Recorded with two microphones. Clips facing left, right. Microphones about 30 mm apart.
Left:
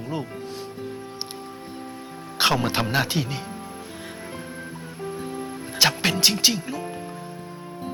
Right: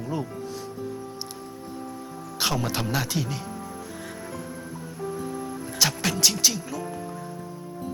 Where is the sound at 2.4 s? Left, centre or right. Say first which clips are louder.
Left 5 dB; left.